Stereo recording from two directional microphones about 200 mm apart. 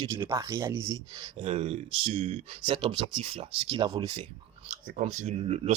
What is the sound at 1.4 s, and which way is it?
Speech, 30° right (ahead or behind).